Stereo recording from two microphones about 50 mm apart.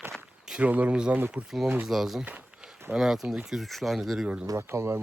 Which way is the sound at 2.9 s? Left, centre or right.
Centre.